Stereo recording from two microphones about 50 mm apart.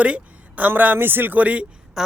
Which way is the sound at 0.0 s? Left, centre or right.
Right.